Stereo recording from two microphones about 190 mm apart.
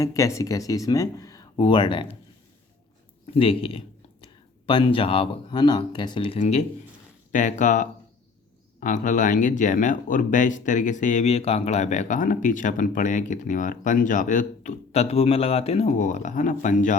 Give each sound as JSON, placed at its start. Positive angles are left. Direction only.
{"t": 0.0, "sound": "speech", "side_deg": 15}
{"t": 3.3, "sound": "speech", "side_deg": 30}
{"t": 6.4, "sound": "speech", "side_deg": 35}